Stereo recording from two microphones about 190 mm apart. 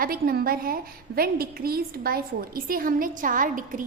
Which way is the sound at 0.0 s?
50° right (ahead or behind).